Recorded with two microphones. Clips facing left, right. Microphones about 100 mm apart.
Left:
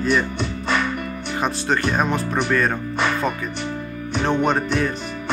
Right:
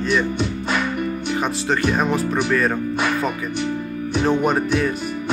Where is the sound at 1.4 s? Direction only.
Centre (ahead or behind).